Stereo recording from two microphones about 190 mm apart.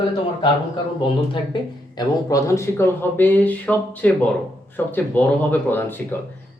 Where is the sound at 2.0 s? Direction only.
15° left (ahead or behind).